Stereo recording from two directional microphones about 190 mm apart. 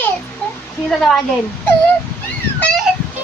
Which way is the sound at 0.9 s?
Centre (ahead or behind).